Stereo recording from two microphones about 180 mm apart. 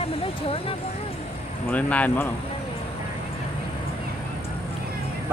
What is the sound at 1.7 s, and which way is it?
Speech, 10° left (ahead or behind).